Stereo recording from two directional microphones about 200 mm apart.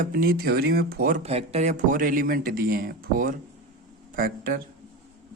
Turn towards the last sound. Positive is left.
turn(degrees=-45)  # may be behind; listen again after turning